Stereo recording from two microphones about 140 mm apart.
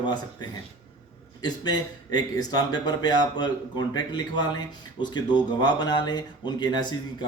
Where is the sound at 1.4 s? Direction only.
30° left (ahead or behind).